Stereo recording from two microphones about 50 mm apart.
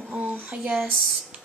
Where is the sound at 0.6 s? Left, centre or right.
Centre.